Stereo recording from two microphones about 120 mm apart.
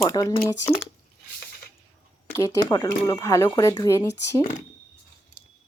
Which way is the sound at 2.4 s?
30° left (ahead or behind).